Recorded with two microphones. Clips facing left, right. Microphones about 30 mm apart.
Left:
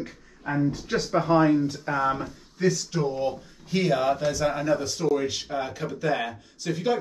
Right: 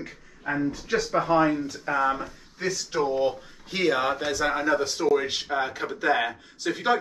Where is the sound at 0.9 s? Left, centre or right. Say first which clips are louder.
Even; right.